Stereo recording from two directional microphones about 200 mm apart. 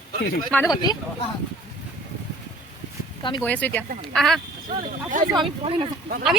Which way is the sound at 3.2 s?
25° left (ahead or behind).